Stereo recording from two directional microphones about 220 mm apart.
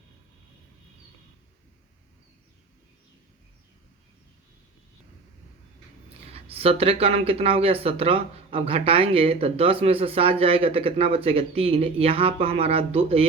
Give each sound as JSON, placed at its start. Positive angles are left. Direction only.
{"t": 6.1, "sound": "speech", "side_deg": -25}